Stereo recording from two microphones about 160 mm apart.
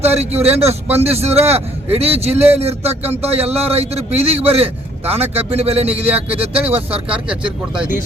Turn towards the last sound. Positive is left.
turn(degrees=-5)  # may be behind; listen again after turning